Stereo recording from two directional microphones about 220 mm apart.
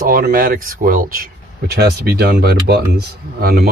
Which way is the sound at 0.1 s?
40° right (ahead or behind).